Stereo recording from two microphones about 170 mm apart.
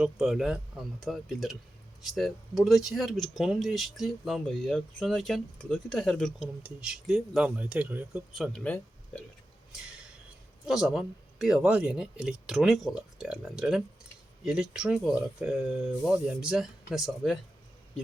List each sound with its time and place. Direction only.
0.0 s speech: 5° right (ahead or behind)
8.4 s speech: 5° left (ahead or behind)
10.7 s speech: 5° right (ahead or behind)